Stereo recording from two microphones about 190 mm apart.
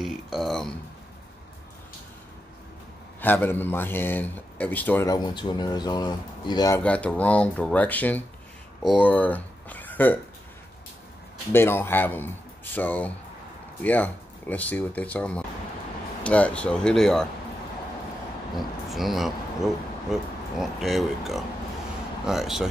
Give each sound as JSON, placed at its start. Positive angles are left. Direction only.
{"t": 0.0, "sound": "speech", "side_deg": 0}
{"t": 3.2, "sound": "speech", "side_deg": 10}
{"t": 5.1, "sound": "speech", "side_deg": 25}
{"t": 6.8, "sound": "speech", "side_deg": 5}
{"t": 11.5, "sound": "speech", "side_deg": 10}
{"t": 18.6, "sound": "speech", "side_deg": 0}